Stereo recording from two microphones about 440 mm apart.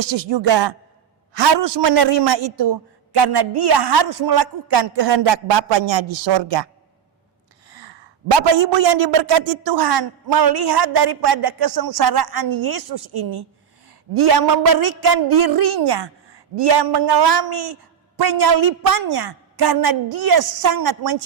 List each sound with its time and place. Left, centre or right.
0.0 s a man's voice: right
1.6 s speech: right
8.4 s a woman's voice: right